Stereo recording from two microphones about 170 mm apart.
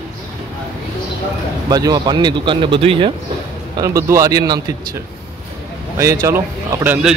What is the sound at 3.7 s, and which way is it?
Speech, 20° right (ahead or behind).